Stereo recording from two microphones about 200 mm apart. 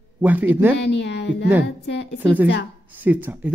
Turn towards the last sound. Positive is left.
turn(degrees=-10)  # may be behind; listen again after turning